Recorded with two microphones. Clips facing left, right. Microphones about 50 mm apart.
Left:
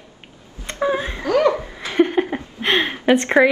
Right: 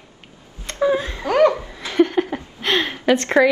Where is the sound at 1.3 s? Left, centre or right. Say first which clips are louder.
Right 1 dB; right.